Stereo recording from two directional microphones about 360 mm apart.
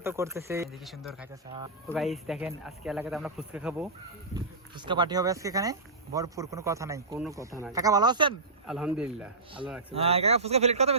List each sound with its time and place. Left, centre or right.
0.0 s a man's voice: centre
8.6 s a man's voice: centre
9.9 s a man's voice: centre